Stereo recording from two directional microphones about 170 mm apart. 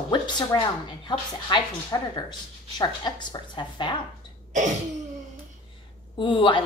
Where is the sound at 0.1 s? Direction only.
25° left (ahead or behind).